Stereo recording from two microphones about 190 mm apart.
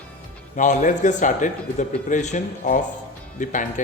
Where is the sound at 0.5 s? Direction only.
40° left (ahead or behind).